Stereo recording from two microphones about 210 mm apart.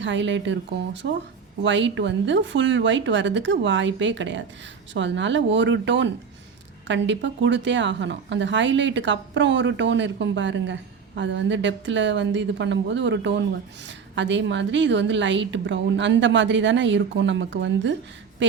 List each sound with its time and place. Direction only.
0.0 s a woman's voice: 60° right (ahead or behind)